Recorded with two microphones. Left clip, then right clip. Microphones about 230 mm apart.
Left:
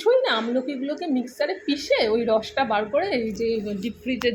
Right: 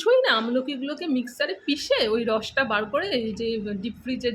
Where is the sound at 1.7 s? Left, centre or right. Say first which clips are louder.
Left 1 dB; right.